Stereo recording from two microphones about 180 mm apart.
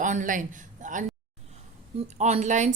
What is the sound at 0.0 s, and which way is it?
Speech, 45° right (ahead or behind).